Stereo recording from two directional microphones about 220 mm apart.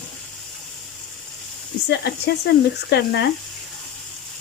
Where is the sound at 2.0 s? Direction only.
50° left (ahead or behind).